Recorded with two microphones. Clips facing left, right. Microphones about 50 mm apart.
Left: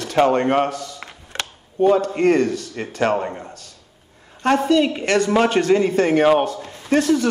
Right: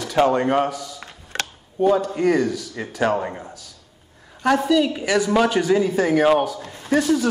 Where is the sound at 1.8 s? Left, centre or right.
Left.